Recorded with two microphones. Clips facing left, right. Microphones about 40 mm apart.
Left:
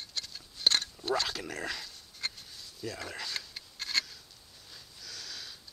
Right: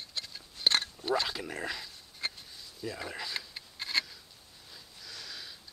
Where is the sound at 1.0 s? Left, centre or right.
Centre.